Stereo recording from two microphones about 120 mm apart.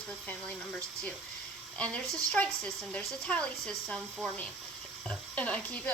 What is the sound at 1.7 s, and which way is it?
Speech, 10° left (ahead or behind).